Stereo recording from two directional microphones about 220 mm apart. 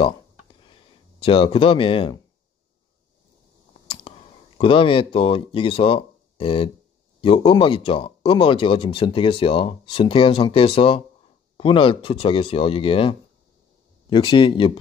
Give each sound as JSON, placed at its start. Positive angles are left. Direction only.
{"t": 1.2, "sound": "speech", "side_deg": 25}
{"t": 3.8, "sound": "a sound", "side_deg": 25}
{"t": 4.6, "sound": "speech", "side_deg": 25}
{"t": 14.1, "sound": "speech", "side_deg": 20}